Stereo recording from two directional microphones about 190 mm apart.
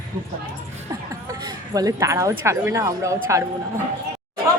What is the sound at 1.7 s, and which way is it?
Speech, 15° right (ahead or behind).